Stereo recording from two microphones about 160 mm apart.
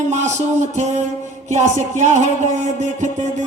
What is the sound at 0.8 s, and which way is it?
A man's voice, 45° right (ahead or behind).